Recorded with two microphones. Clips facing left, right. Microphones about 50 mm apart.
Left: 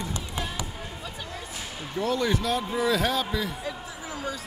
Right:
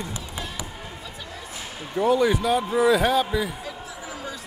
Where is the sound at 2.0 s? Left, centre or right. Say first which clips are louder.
Right 6 dB; centre.